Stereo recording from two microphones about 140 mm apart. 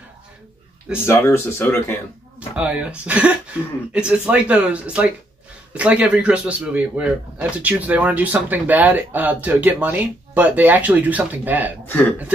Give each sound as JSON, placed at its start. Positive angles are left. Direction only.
{"t": 1.0, "sound": "speech", "side_deg": 15}
{"t": 2.5, "sound": "speech", "side_deg": -10}
{"t": 11.8, "sound": "speech", "side_deg": 15}